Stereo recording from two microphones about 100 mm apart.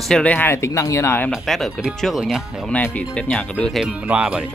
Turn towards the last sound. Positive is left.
turn(degrees=-10)  # may be behind; listen again after turning